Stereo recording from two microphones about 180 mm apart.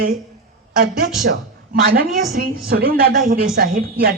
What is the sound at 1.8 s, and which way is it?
A woman's voice, 55° right (ahead or behind).